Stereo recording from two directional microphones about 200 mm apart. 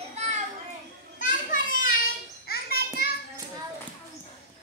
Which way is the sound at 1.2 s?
40° left (ahead or behind).